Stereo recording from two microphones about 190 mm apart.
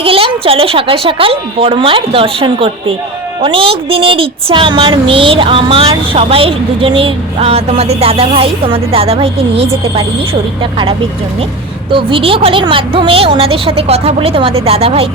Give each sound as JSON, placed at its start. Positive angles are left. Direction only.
{"t": 0.0, "sound": "speech", "side_deg": -30}